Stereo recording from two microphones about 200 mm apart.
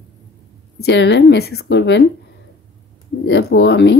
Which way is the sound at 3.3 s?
55° left (ahead or behind).